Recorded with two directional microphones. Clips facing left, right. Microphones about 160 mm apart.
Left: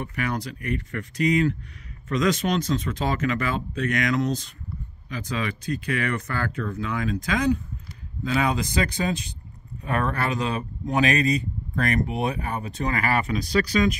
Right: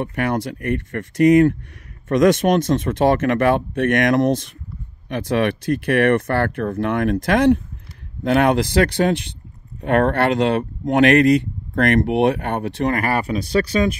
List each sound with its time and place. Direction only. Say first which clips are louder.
0.0 s speech: right 7 dB; 60° right (ahead or behind)
13.2 s speech: right 4 dB; 30° right (ahead or behind)